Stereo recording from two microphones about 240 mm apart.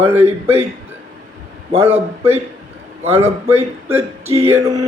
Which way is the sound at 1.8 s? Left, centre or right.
Centre.